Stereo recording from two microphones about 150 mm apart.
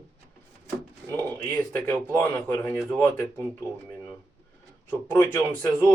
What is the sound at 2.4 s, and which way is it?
A man's voice, 15° left (ahead or behind).